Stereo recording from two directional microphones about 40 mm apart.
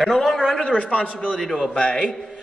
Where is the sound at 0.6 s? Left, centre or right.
Left.